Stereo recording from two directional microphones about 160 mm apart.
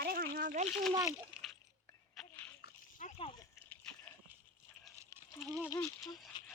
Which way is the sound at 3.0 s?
40° left (ahead or behind).